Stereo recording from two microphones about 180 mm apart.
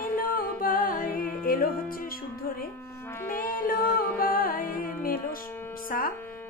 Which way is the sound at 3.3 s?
50° left (ahead or behind).